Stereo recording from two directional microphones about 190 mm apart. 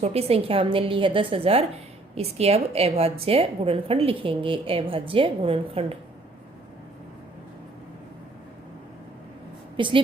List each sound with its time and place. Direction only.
0.0 s a woman's voice: 30° right (ahead or behind)
9.7 s a woman's voice: 25° right (ahead or behind)